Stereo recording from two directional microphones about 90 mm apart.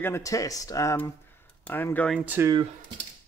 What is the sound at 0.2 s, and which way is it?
Speech, 40° left (ahead or behind).